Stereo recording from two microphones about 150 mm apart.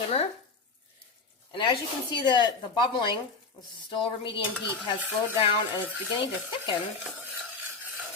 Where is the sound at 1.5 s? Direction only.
30° left (ahead or behind).